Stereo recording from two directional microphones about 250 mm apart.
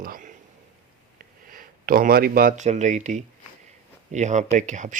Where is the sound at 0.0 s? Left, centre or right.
Right.